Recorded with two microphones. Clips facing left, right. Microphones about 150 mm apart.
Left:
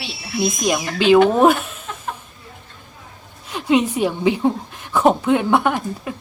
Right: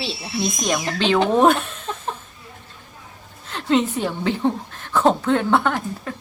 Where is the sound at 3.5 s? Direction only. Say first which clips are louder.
Left 2 dB; 15° left (ahead or behind).